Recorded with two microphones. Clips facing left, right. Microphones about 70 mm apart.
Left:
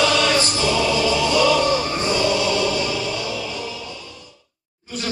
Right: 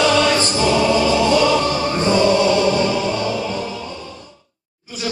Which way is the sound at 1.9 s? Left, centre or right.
Right.